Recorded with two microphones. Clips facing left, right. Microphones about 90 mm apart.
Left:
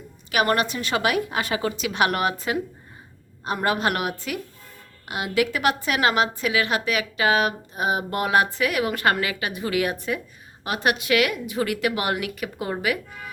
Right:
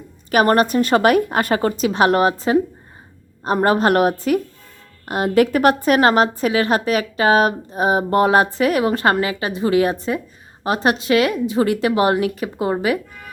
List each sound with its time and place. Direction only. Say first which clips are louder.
0.3 s a woman's voice: right 7 dB; 40° right (ahead or behind)